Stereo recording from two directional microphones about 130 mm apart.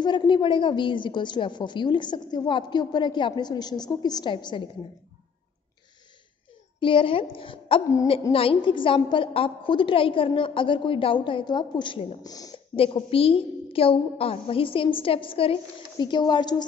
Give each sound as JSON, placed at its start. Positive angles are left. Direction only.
{"t": 0.0, "sound": "a woman's voice", "side_deg": 35}
{"t": 6.8, "sound": "a woman's voice", "side_deg": 40}
{"t": 12.2, "sound": "speech", "side_deg": 30}
{"t": 12.7, "sound": "a woman's voice", "side_deg": 45}